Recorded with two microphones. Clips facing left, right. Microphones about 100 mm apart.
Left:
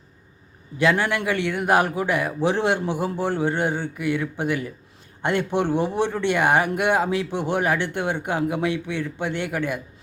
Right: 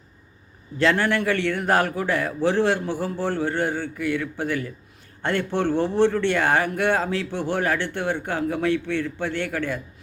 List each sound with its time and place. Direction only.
0.8 s speech: 15° left (ahead or behind)